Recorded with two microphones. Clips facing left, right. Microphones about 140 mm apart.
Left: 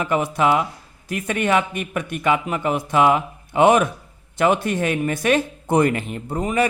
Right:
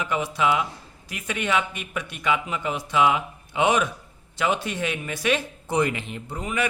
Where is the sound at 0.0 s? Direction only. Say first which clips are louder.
Left 5 dB; 50° left (ahead or behind).